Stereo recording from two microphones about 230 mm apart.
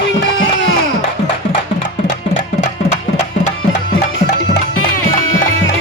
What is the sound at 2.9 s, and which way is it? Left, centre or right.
Music, left.